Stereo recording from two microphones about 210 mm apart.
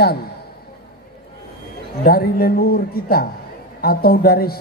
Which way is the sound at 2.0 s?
45° left (ahead or behind).